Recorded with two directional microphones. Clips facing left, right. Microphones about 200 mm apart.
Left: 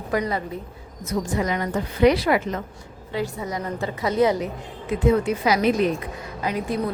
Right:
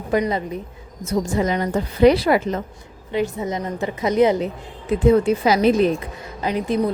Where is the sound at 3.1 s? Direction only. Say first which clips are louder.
Right 5 dB; 20° right (ahead or behind).